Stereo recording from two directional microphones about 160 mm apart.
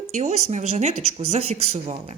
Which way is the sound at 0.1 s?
45° right (ahead or behind).